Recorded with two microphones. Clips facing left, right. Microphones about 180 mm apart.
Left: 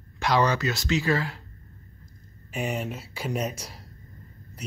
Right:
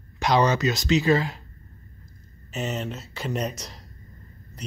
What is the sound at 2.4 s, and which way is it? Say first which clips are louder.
Speech: even; 10° left (ahead or behind).